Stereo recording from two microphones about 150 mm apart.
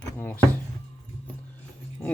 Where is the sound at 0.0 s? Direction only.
10° left (ahead or behind).